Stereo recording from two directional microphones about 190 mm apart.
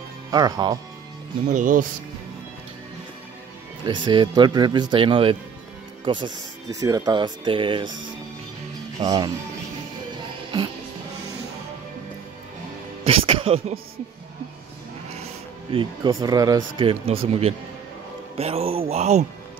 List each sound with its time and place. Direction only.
0.3 s speech: 20° right (ahead or behind)
1.5 s speech: 45° right (ahead or behind)
3.8 s speech: 25° right (ahead or behind)
9.0 s speech: 20° right (ahead or behind)
13.0 s music: 30° right (ahead or behind)
15.7 s speech: 25° right (ahead or behind)